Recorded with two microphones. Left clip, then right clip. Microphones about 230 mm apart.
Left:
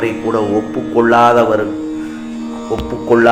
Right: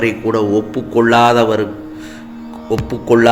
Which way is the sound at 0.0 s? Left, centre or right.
Right.